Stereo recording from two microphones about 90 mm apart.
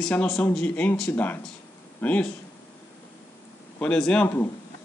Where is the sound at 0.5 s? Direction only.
15° left (ahead or behind).